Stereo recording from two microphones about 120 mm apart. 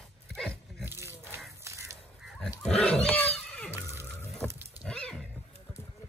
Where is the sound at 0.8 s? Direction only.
20° right (ahead or behind).